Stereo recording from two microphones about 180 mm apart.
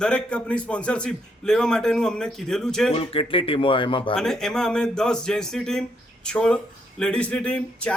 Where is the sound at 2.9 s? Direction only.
30° left (ahead or behind).